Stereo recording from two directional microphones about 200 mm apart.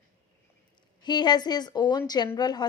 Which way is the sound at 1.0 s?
20° left (ahead or behind).